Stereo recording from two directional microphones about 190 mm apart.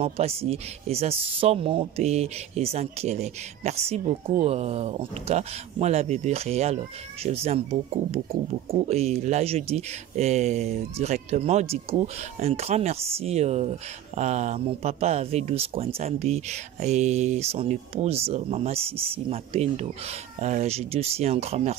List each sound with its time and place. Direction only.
0.0 s speech: 30° right (ahead or behind)